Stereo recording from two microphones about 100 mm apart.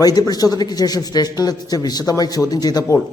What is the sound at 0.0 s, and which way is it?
A man's voice, 40° left (ahead or behind).